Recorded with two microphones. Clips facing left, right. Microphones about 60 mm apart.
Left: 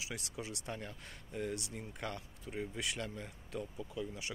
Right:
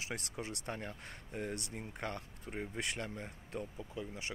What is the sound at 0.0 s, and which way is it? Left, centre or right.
Speech, right.